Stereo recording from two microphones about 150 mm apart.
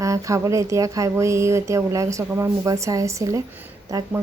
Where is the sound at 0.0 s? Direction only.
20° right (ahead or behind).